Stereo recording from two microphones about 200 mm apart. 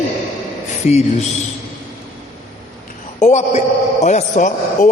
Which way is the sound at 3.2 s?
35° left (ahead or behind).